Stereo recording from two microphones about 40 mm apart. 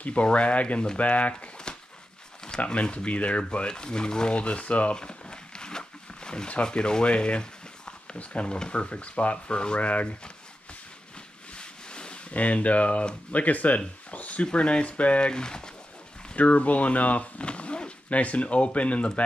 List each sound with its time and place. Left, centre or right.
0.0 s speech: left
2.6 s speech: left
4.9 s a sound: left
6.5 s speech: left
9.8 s speech: left
11.5 s a sound: left
12.4 s speech: left; by 15.7 s centre
16.3 s speech: left